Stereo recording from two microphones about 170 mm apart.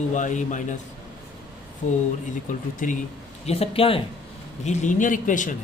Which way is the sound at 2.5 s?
50° left (ahead or behind).